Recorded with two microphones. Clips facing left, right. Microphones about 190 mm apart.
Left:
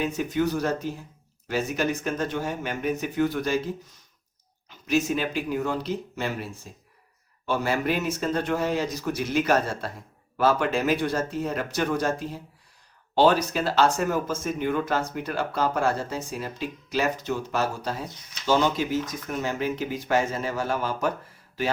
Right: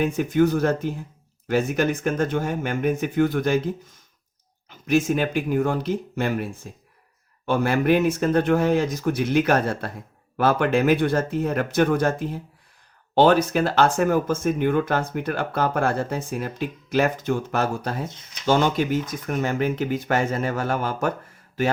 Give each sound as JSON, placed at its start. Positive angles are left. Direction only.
{"t": 0.0, "sound": "speech", "side_deg": -50}
{"t": 4.7, "sound": "speech", "side_deg": -50}